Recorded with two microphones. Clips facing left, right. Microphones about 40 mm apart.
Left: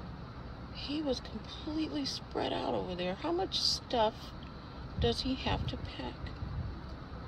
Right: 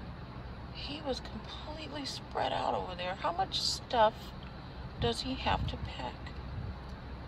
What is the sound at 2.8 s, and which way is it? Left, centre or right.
Speech, centre.